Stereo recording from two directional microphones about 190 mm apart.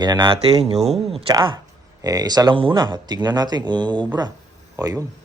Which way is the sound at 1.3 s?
20° right (ahead or behind).